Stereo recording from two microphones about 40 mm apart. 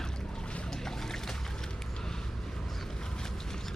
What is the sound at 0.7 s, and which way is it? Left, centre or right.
Boat, centre.